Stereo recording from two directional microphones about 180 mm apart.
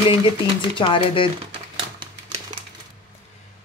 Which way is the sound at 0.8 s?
30° left (ahead or behind).